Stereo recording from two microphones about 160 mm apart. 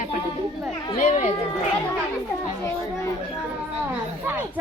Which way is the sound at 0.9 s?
50° left (ahead or behind).